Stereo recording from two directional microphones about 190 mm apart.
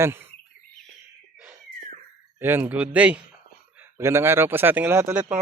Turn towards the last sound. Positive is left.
turn(degrees=-10)  # may be behind; listen again after turning